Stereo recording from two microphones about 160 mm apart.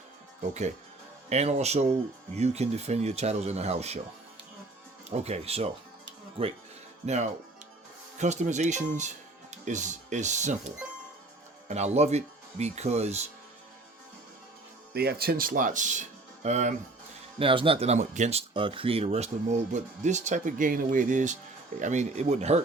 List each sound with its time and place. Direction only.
1.3 s speech: 45° right (ahead or behind)
5.0 s speech: 40° right (ahead or behind)
7.0 s speech: 45° right (ahead or behind)
11.7 s speech: 45° right (ahead or behind)
14.9 s speech: 75° right (ahead or behind); by 16.7 s 45° right (ahead or behind)
17.4 s speech: 35° right (ahead or behind)